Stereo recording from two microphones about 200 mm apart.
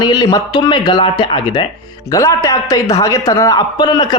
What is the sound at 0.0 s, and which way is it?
A man's voice, 20° left (ahead or behind).